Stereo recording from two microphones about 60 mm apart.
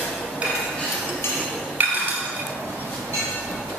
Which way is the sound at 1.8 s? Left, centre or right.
Right.